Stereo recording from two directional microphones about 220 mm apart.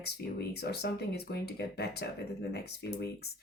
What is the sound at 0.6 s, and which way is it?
A woman's voice, 50° left (ahead or behind).